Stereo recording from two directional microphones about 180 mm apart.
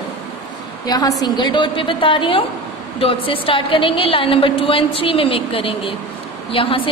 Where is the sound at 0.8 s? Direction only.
20° left (ahead or behind).